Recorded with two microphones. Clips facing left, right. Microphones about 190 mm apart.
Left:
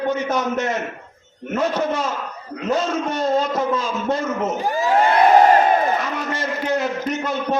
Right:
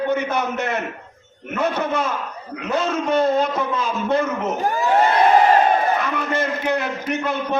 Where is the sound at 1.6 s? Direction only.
60° right (ahead or behind).